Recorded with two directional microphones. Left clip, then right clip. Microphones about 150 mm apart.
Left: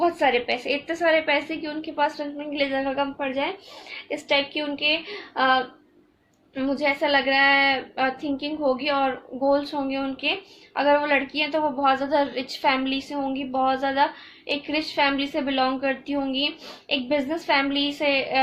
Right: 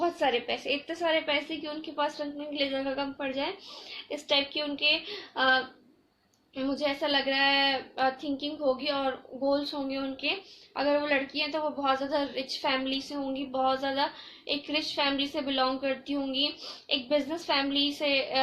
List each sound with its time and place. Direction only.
0.0 s a woman's voice: 35° left (ahead or behind)
6.6 s a woman's voice: 45° left (ahead or behind)